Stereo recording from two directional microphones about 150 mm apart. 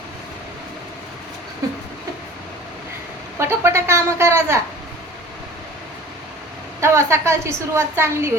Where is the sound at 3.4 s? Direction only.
15° right (ahead or behind).